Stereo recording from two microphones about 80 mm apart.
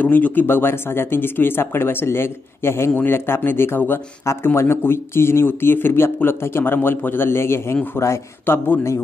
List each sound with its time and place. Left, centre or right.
0.0 s speech: left